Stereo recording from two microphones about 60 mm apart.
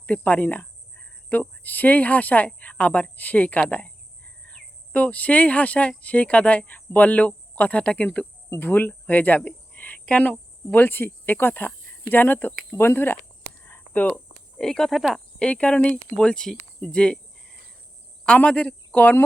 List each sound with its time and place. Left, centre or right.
0.0 s speech: left
8.5 s speech: left
9.7 s a sound: left
10.1 s speech: left
13.7 s hum: left
14.6 s speech: centre
14.9 s speech: centre
15.4 s speech: centre
18.3 s speech: left